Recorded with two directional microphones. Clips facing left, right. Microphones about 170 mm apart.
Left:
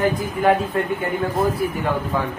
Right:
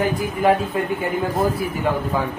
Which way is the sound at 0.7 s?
5° right (ahead or behind).